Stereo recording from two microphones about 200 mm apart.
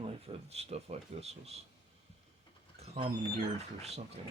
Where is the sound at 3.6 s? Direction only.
30° right (ahead or behind).